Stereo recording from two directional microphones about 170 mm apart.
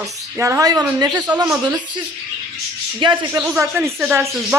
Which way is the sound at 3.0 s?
25° right (ahead or behind).